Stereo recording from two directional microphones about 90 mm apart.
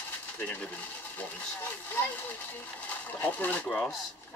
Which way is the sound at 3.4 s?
15° left (ahead or behind).